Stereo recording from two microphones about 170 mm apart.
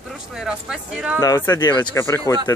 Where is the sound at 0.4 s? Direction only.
5° right (ahead or behind).